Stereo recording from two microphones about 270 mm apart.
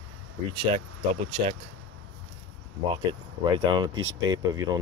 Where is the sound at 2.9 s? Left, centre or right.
Centre.